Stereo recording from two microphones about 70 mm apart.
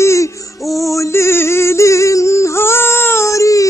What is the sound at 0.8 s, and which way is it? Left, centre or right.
Yodeling, left.